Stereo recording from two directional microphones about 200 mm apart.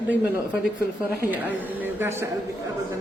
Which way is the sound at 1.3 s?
10° right (ahead or behind).